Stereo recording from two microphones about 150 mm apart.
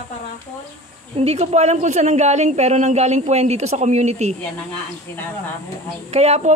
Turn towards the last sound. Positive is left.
turn(degrees=-45)  # may be behind; listen again after turning